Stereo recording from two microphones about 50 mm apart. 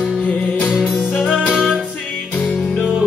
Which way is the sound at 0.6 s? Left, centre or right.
Centre.